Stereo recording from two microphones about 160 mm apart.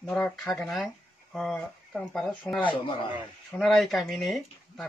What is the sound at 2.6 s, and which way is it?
Speech, 30° left (ahead or behind).